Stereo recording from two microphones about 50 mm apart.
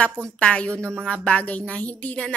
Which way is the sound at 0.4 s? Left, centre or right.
Left.